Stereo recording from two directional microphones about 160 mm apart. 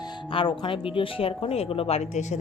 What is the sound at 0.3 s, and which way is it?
Speech, 30° left (ahead or behind).